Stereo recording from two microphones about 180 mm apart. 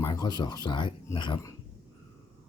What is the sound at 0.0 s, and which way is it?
Speech, 20° left (ahead or behind).